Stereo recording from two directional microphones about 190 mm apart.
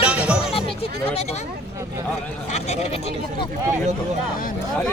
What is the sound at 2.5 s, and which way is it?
Speech, 35° left (ahead or behind).